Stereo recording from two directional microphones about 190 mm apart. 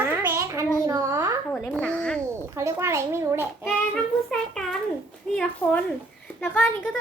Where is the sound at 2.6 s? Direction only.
15° right (ahead or behind).